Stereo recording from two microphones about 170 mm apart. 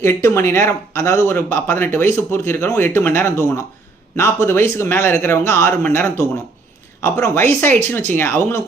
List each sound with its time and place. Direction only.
0.0 s speech: 15° left (ahead or behind)